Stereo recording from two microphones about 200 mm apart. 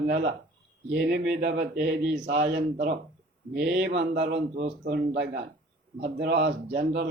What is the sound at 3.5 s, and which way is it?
A man's voice, 55° right (ahead or behind).